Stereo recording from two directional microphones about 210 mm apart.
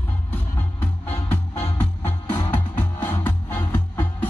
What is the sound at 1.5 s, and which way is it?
Music, 35° left (ahead or behind).